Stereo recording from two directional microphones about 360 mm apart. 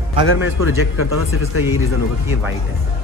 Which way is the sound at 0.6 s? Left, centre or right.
Left.